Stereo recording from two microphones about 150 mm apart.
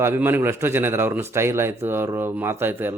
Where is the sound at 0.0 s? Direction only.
15° right (ahead or behind).